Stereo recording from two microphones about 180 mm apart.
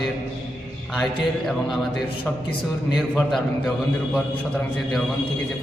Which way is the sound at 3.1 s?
5° left (ahead or behind).